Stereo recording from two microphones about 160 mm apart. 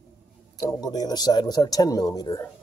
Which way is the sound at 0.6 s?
25° left (ahead or behind).